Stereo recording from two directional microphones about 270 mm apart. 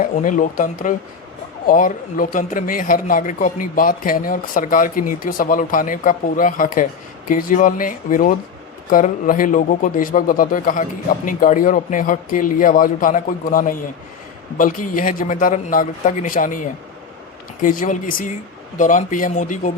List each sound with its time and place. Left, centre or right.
0.0 s speech: left